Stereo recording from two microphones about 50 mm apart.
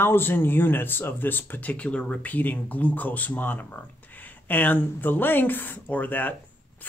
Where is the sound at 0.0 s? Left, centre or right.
Left.